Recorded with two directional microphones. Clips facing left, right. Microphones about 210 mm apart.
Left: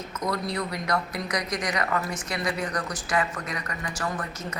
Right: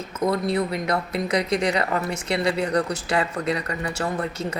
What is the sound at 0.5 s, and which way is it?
Speech, 25° right (ahead or behind).